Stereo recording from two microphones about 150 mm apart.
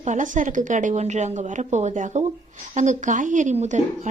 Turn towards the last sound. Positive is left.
turn(degrees=-55)  # may be behind; listen again after turning